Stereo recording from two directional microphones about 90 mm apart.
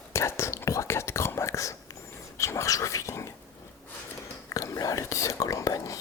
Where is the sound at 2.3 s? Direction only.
35° left (ahead or behind).